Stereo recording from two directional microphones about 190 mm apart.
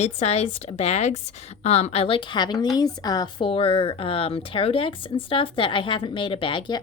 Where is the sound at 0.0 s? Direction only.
35° left (ahead or behind).